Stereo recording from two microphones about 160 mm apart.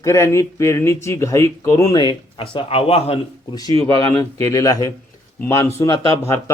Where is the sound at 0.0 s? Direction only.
20° left (ahead or behind); by 3.2 s 35° left (ahead or behind).